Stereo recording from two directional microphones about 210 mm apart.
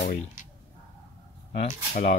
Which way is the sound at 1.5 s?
40° left (ahead or behind).